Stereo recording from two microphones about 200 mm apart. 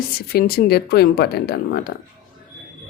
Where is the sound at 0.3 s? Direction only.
50° left (ahead or behind).